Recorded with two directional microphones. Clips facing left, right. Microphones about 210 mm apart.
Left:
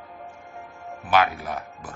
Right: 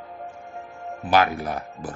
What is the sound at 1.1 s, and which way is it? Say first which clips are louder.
Speech: right 1 dB; 40° right (ahead or behind).